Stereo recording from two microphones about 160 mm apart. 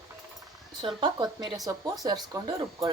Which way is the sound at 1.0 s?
25° right (ahead or behind).